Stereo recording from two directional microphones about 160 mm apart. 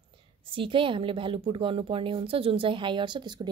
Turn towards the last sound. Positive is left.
turn(degrees=-30)  # may be behind; listen again after turning